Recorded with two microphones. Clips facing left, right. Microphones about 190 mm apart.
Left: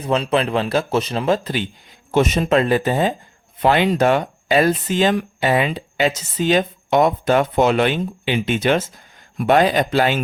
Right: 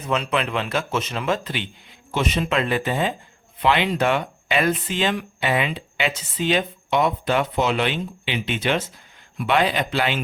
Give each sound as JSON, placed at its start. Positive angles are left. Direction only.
{"t": 0.0, "sound": "speech", "side_deg": 35}